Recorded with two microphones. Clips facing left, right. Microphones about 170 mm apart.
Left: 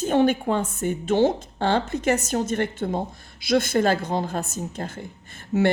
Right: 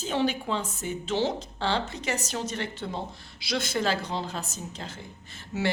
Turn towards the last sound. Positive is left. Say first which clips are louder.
# left 9 dB
turn(degrees=50)  # may be behind; listen again after turning